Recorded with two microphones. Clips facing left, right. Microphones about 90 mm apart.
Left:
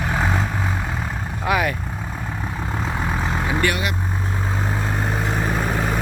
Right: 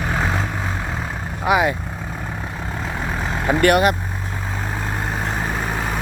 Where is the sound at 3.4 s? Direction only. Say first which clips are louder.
Right 10 dB; 50° right (ahead or behind).